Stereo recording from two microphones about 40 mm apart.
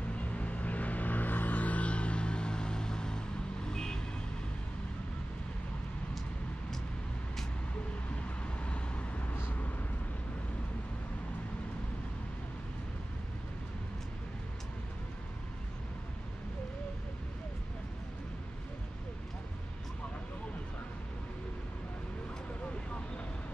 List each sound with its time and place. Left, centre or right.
0.1 s a sound: left; by 4.0 s centre
8.2 s vehicle: left
9.5 s vehicle: left